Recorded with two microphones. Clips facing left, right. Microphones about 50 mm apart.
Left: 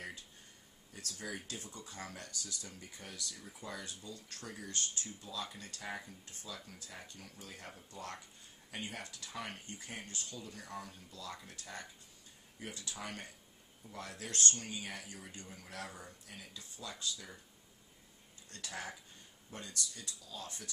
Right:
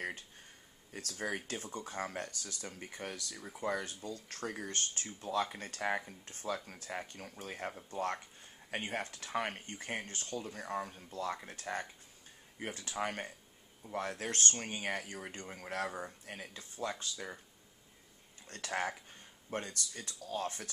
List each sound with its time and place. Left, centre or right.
0.9 s speech: right
18.5 s speech: right